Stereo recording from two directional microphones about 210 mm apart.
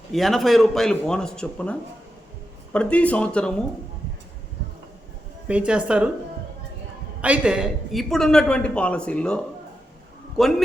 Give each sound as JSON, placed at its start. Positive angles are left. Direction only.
{"t": 0.1, "sound": "a woman's voice", "side_deg": 0}
{"t": 2.7, "sound": "a woman's voice", "side_deg": 5}
{"t": 5.5, "sound": "a woman's voice", "side_deg": -5}
{"t": 7.2, "sound": "a woman's voice", "side_deg": -5}